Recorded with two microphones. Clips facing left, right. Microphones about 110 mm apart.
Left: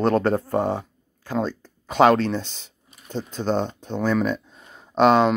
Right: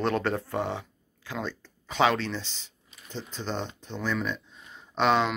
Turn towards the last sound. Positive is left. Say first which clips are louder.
# left 7 dB
turn(degrees=45)  # may be behind; listen again after turning